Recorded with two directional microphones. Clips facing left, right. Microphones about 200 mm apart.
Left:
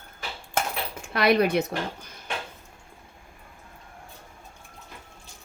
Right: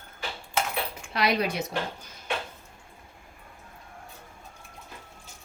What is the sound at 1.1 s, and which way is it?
Speech, 55° left (ahead or behind).